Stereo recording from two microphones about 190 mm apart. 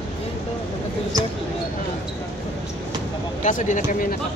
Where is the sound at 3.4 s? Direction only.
40° left (ahead or behind).